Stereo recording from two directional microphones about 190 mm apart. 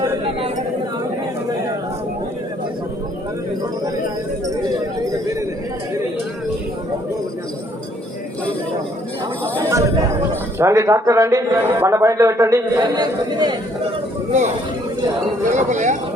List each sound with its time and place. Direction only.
9.4 s jingle bell: 15° right (ahead or behind)
10.6 s a man's voice: 15° right (ahead or behind)
15.5 s speech: 40° right (ahead or behind)